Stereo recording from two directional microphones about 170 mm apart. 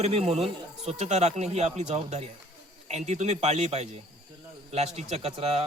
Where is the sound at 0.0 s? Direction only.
40° right (ahead or behind).